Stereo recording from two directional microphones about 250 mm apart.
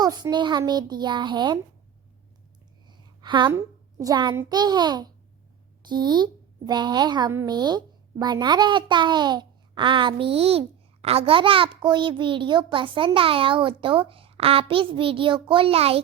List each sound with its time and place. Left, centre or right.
0.0 s a woman's voice: centre
2.8 s a child's voice: centre